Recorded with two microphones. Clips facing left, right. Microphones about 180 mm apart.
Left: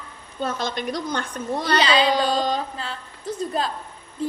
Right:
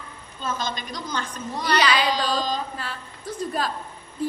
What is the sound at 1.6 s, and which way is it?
A woman's voice, 25° left (ahead or behind).